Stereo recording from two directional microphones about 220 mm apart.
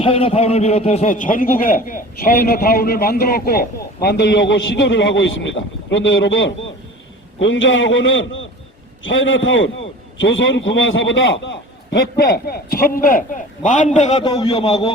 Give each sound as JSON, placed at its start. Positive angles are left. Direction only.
{"t": 0.0, "sound": "a man's voice", "side_deg": 25}